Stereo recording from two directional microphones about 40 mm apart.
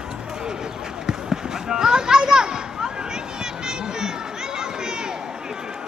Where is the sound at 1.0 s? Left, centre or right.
Centre.